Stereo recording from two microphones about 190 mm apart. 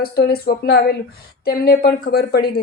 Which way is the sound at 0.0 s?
55° left (ahead or behind).